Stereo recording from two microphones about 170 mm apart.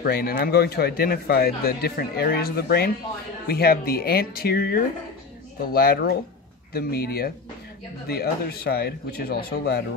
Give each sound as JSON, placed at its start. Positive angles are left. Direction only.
{"t": 0.0, "sound": "a man's voice", "side_deg": 65}